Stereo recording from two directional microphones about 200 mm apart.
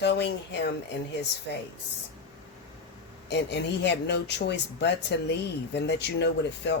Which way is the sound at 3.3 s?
60° left (ahead or behind).